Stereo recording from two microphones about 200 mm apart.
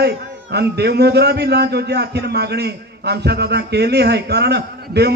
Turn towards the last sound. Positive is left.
turn(degrees=-55)  # may be behind; listen again after turning